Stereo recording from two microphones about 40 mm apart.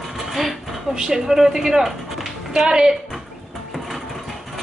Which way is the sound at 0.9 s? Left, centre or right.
Centre.